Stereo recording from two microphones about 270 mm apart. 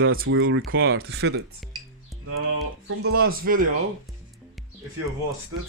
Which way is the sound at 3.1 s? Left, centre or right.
Right.